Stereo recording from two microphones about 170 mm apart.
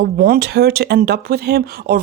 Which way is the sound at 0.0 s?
65° right (ahead or behind).